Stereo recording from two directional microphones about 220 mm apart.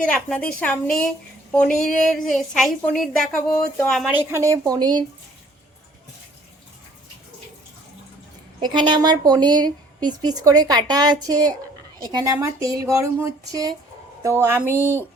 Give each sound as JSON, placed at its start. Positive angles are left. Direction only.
{"t": 0.1, "sound": "speech", "side_deg": 5}
{"t": 2.3, "sound": "speech", "side_deg": 0}
{"t": 8.6, "sound": "a woman's voice", "side_deg": -20}